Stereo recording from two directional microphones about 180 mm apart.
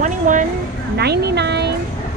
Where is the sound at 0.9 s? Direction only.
65° right (ahead or behind).